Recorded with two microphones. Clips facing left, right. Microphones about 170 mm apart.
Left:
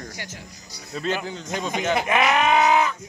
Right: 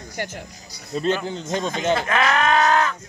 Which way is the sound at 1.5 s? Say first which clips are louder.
Right 2 dB; 10° left (ahead or behind).